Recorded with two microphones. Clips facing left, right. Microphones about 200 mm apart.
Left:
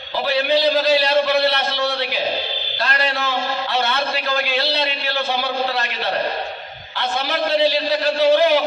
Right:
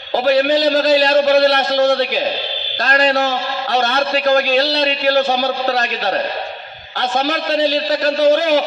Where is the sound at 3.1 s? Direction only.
45° right (ahead or behind).